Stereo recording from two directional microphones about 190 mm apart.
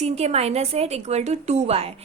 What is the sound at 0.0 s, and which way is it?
A woman's voice, 35° right (ahead or behind).